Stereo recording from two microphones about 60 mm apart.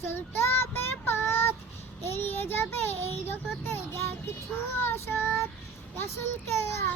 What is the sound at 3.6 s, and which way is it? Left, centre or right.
Child singing, left.